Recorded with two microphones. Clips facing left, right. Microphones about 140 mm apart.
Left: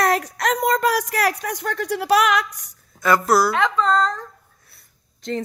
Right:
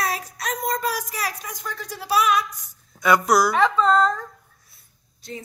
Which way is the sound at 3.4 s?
10° right (ahead or behind).